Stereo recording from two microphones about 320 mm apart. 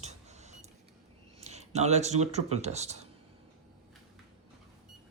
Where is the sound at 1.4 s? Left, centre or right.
Right.